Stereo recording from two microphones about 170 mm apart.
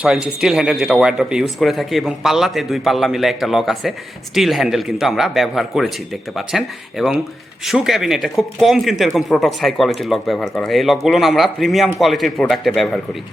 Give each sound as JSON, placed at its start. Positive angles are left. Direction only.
{"t": 0.0, "sound": "speech", "side_deg": -5}